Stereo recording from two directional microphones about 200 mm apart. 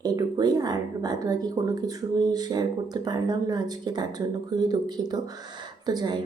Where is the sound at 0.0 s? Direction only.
20° right (ahead or behind).